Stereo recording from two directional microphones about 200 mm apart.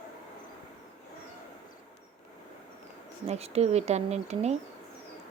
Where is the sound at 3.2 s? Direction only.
30° right (ahead or behind).